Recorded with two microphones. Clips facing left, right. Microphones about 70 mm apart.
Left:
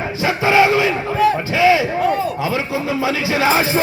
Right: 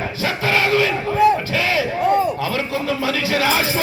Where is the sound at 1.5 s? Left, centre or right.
Left.